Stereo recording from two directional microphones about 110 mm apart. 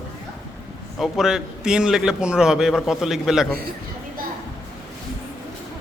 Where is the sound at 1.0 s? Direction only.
5° right (ahead or behind).